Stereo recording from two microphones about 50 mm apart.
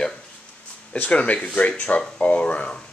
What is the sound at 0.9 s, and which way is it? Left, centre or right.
Speech, left.